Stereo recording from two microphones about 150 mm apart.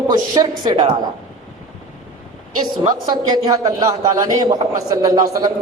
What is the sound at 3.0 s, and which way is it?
A man's voice, 30° right (ahead or behind).